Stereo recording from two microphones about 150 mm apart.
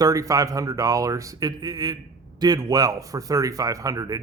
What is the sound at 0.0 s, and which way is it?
Speech, 25° right (ahead or behind).